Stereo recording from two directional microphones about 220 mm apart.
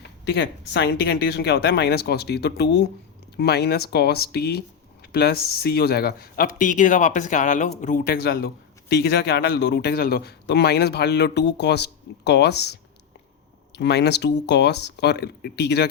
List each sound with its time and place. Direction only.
0.0 s speech: 50° left (ahead or behind)